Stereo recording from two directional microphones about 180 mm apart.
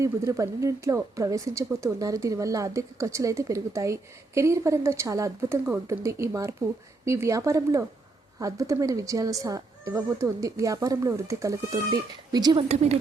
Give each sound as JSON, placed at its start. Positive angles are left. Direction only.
{"t": 0.0, "sound": "speech", "side_deg": -15}
{"t": 12.6, "sound": "a woman's voice", "side_deg": -35}